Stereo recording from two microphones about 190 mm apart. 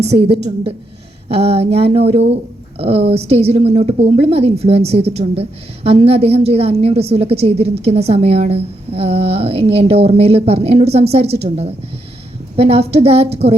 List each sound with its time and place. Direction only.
0.3 s a woman's voice: 60° right (ahead or behind)
1.3 s a woman's voice: 35° right (ahead or behind)